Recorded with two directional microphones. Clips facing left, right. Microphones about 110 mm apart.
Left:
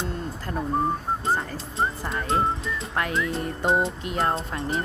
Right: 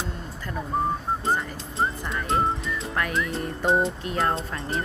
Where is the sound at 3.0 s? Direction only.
25° left (ahead or behind).